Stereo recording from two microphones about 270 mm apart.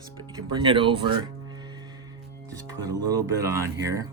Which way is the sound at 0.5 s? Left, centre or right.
Centre.